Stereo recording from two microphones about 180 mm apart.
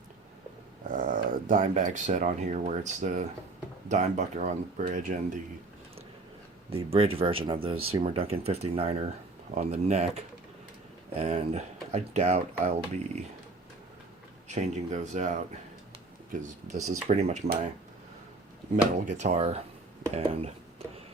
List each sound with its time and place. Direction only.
0.9 s speech: 50° right (ahead or behind)
6.7 s speech: 30° right (ahead or behind)
14.5 s speech: 40° right (ahead or behind)
16.8 s speech: 35° right (ahead or behind)
19.1 s speech: 40° right (ahead or behind)